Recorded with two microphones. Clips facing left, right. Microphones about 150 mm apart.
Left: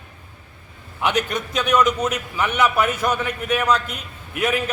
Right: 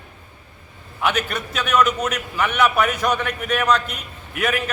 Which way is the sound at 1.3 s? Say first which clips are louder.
Left 1 dB; 10° left (ahead or behind).